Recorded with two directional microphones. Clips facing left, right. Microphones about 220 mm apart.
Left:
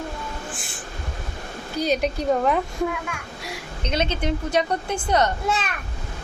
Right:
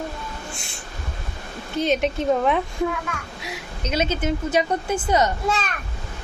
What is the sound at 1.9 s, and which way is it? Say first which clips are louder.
A woman's voice: right 1 dB; centre (ahead or behind).